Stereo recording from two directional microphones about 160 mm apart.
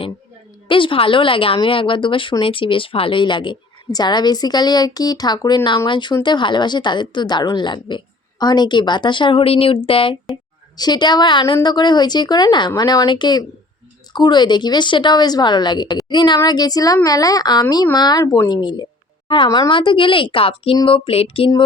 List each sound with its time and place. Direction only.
0.7 s a woman's voice: 30° left (ahead or behind)